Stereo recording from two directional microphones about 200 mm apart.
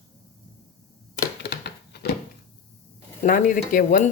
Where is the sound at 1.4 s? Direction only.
55° left (ahead or behind).